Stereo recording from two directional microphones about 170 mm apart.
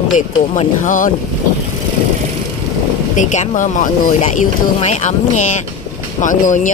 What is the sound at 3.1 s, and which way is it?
Speech, 45° left (ahead or behind).